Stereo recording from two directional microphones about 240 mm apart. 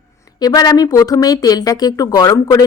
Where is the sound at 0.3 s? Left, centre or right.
Centre.